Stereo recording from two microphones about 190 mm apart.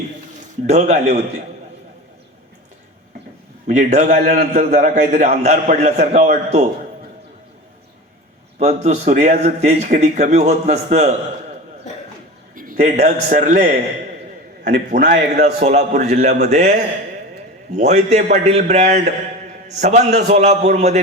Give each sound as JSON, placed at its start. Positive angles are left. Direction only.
{"t": 0.7, "sound": "a man's voice", "side_deg": -35}
{"t": 3.7, "sound": "a man's voice", "side_deg": -40}
{"t": 8.5, "sound": "a man's voice", "side_deg": -35}
{"t": 12.5, "sound": "a man's voice", "side_deg": -45}
{"t": 14.8, "sound": "a man's voice", "side_deg": -40}
{"t": 17.7, "sound": "a man's voice", "side_deg": -35}